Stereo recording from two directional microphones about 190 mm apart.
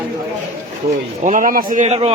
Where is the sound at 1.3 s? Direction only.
45° right (ahead or behind).